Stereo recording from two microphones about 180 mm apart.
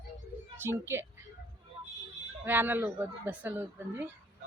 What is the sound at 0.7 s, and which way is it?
Speech, 15° right (ahead or behind).